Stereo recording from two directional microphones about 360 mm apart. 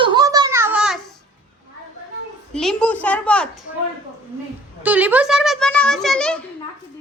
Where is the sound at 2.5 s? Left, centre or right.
Centre.